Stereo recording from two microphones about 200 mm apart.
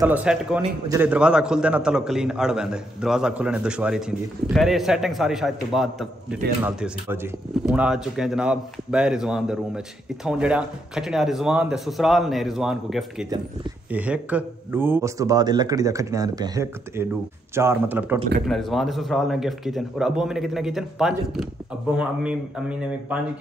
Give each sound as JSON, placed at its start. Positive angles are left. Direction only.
{"t": 0.0, "sound": "a man's voice", "side_deg": -5}